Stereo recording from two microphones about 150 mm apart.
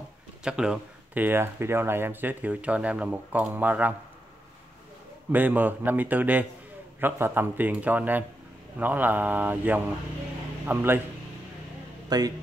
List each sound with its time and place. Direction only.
0.4 s speech: 5° right (ahead or behind)
5.3 s speech: 10° right (ahead or behind)
12.1 s a man's voice: 25° right (ahead or behind)